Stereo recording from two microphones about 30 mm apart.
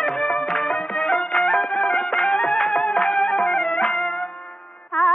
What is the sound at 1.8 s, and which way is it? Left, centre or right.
Music, left.